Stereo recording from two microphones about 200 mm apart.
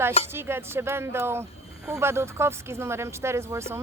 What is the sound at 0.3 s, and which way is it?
Speech, 10° right (ahead or behind).